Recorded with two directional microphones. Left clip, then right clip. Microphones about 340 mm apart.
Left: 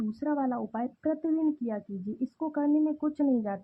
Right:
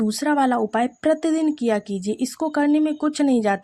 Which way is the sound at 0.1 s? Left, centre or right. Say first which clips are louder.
Right 11 dB; right.